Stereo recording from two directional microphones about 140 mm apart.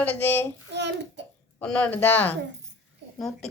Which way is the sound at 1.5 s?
10° left (ahead or behind).